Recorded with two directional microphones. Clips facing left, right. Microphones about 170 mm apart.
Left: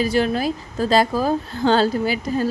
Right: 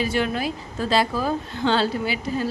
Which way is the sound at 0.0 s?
35° left (ahead or behind).